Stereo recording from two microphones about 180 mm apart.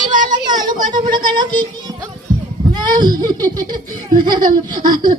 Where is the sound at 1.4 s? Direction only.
25° right (ahead or behind).